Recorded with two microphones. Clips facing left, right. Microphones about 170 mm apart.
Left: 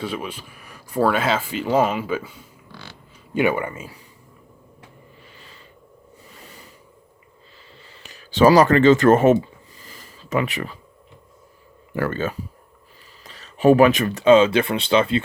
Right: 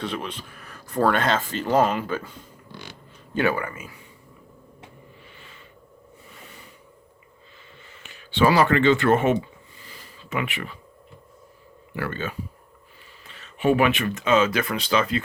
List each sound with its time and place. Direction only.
0.0 s speech: 10° left (ahead or behind)
3.3 s speech: 20° left (ahead or behind)
7.9 s a sound: 40° left (ahead or behind)
11.9 s speech: 45° left (ahead or behind); by 15.2 s 30° left (ahead or behind)